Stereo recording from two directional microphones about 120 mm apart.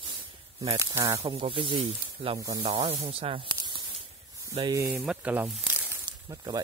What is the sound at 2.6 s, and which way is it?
Speech, 55° right (ahead or behind).